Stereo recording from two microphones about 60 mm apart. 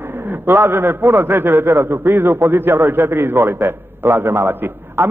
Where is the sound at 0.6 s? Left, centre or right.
Right.